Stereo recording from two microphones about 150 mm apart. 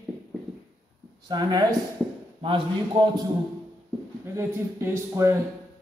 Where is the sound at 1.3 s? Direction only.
25° right (ahead or behind).